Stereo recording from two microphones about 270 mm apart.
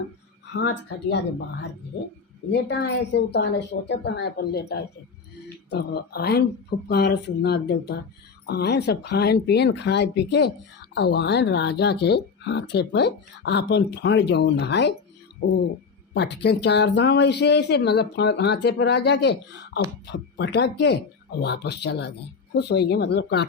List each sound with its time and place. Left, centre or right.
2.5 s speech: left
16.1 s speech: left